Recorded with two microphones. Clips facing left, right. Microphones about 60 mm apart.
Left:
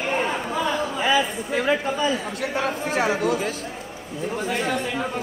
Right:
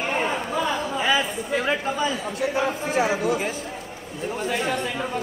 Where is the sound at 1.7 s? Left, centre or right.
Centre.